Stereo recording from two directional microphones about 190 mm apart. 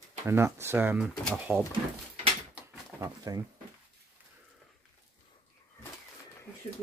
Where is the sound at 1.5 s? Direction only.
Centre (ahead or behind).